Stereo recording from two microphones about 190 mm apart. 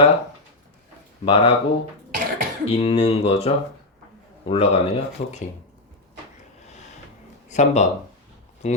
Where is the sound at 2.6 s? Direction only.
30° left (ahead or behind).